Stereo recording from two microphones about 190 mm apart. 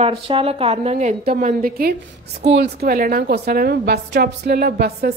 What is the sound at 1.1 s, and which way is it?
A woman's voice, 45° right (ahead or behind).